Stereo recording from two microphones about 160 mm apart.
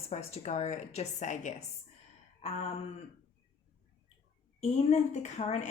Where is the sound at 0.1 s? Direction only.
40° left (ahead or behind).